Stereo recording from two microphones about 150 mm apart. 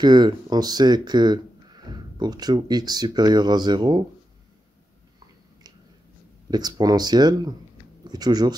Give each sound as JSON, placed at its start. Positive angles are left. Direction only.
{"t": 0.0, "sound": "speech", "side_deg": -30}
{"t": 6.5, "sound": "speech", "side_deg": -25}